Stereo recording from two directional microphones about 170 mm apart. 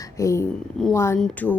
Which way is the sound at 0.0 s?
20° left (ahead or behind).